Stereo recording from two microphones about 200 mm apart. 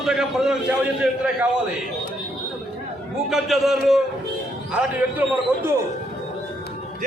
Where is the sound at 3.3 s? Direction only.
Centre (ahead or behind).